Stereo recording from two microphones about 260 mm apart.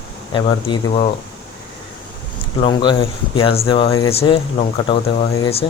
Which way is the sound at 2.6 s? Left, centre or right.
Centre.